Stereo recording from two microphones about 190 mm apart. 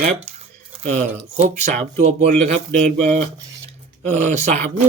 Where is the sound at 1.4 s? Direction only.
35° right (ahead or behind).